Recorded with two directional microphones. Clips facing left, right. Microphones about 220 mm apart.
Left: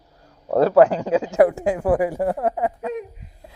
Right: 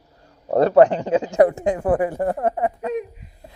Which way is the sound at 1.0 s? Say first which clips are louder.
Even; 5° left (ahead or behind).